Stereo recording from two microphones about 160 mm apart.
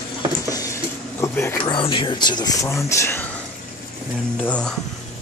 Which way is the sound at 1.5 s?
30° left (ahead or behind).